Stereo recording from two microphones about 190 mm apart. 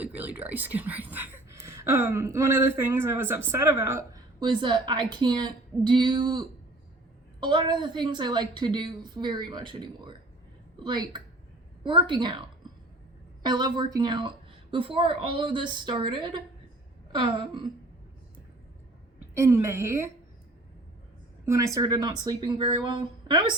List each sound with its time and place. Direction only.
0.0 s a woman's voice: 10° right (ahead or behind); by 12.4 s 25° right (ahead or behind)
13.4 s a woman's voice: 20° right (ahead or behind)
19.3 s speech: 15° right (ahead or behind)
21.4 s a woman's voice: 15° right (ahead or behind)